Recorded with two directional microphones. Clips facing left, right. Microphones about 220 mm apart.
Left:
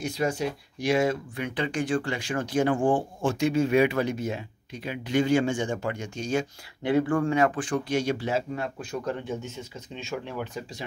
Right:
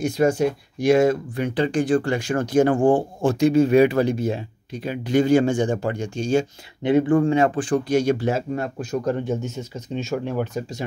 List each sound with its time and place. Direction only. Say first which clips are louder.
0.0 s speech: right 8 dB; 50° right (ahead or behind)